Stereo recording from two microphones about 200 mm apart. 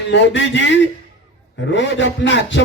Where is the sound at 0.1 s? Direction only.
65° left (ahead or behind).